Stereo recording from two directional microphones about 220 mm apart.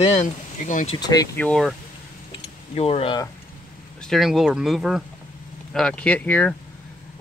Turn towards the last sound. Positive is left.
turn(degrees=5)  # may be behind; listen again after turning